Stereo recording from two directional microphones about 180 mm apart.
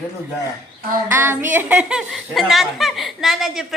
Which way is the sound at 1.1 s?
10° right (ahead or behind).